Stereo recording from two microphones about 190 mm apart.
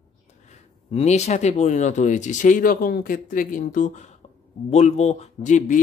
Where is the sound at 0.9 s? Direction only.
35° left (ahead or behind).